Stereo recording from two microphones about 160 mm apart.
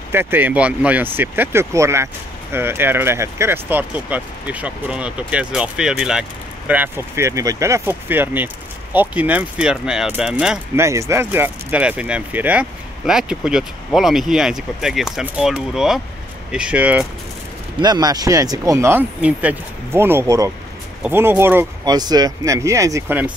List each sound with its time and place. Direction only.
0.1 s speech: 15° right (ahead or behind)
6.7 s speech: 15° right (ahead or behind)
10.8 s speech: 20° right (ahead or behind)
17.7 s speech: 25° right (ahead or behind)